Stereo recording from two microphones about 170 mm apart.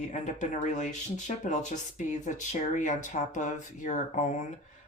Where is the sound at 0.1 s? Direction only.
45° left (ahead or behind).